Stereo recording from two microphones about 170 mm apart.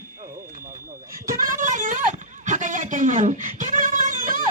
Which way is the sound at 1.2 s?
55° right (ahead or behind).